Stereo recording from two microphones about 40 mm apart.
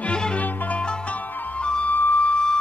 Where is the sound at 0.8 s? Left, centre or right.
Centre.